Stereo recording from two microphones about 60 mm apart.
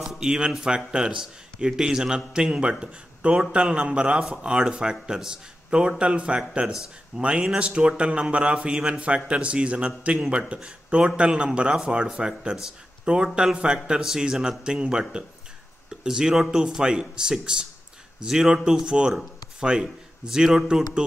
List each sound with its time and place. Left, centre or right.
0.2 s a man's voice: centre